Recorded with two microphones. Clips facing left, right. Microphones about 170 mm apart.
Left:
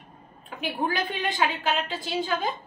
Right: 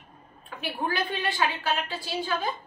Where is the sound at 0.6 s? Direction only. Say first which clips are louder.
Left 2 dB; 20° left (ahead or behind).